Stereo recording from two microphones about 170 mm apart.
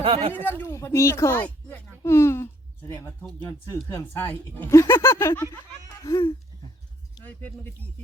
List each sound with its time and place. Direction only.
0.0 s speech: 30° right (ahead or behind)
0.3 s speech: 10° left (ahead or behind)
7.3 s speech: 10° left (ahead or behind)